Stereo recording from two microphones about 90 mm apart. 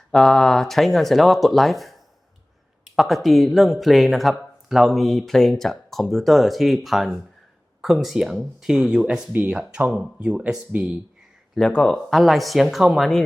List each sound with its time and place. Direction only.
0.1 s speech: 5° left (ahead or behind); by 10.9 s 10° right (ahead or behind)
11.5 s speech: 10° left (ahead or behind)
12.1 s speech: centre (ahead or behind)